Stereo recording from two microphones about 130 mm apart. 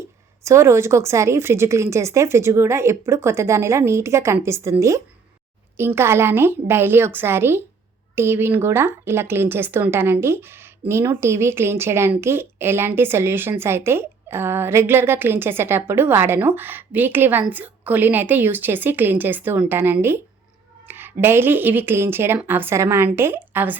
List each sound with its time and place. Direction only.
0.4 s a woman's voice: 20° right (ahead or behind)